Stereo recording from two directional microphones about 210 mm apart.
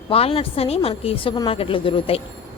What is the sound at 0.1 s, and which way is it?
A woman's voice, 25° left (ahead or behind).